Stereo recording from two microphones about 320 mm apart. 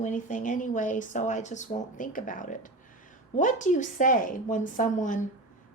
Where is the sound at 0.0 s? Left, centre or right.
Left.